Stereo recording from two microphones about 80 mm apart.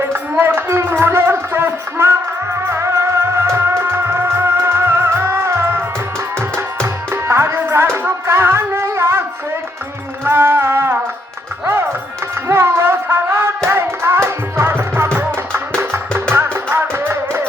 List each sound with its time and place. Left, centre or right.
0.0 s a sound: right
2.6 s music: right
6.8 s music: right
10.2 s music: right
12.5 s music: right